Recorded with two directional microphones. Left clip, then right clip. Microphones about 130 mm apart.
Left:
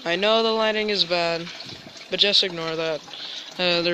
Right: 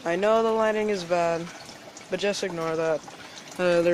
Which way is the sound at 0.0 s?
15° left (ahead or behind).